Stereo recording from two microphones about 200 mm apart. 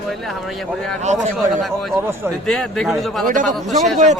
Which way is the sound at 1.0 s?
35° right (ahead or behind).